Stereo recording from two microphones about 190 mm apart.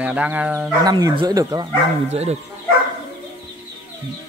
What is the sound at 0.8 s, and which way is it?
Speech, 20° right (ahead or behind).